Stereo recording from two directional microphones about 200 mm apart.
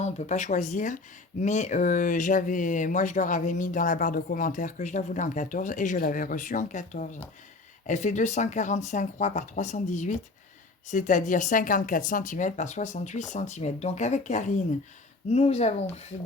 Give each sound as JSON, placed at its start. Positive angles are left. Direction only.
{"t": 0.0, "sound": "speech", "side_deg": 35}